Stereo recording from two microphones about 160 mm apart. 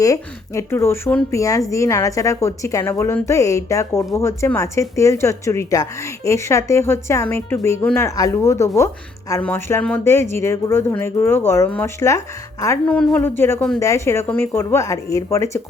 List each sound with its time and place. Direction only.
0.0 s speech: 20° left (ahead or behind)